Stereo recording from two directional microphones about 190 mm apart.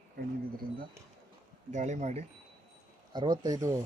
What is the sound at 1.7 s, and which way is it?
Speech, 40° right (ahead or behind).